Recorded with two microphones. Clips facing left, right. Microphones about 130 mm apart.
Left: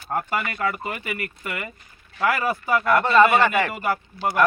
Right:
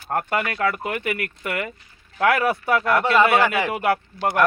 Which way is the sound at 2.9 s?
10° right (ahead or behind).